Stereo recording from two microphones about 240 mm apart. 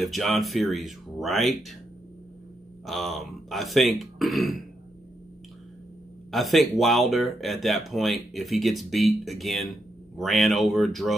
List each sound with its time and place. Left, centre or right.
0.0 s speech: centre
2.9 s speech: centre
6.3 s speech: centre